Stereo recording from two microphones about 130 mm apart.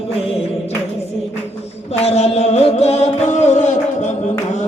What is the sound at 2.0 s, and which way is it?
Music, 55° left (ahead or behind).